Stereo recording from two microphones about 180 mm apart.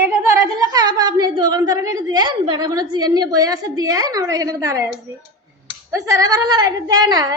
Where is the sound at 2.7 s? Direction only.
20° right (ahead or behind).